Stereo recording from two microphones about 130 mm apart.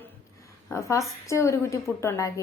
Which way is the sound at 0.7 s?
25° left (ahead or behind).